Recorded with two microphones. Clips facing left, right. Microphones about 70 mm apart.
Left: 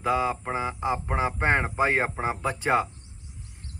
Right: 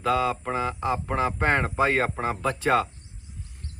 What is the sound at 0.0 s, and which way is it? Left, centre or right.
Speech, centre.